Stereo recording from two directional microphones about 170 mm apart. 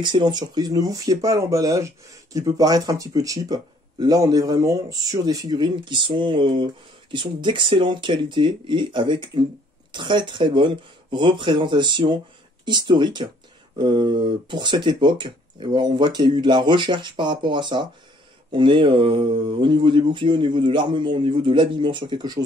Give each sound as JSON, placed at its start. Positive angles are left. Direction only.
{"t": 0.0, "sound": "speech", "side_deg": -25}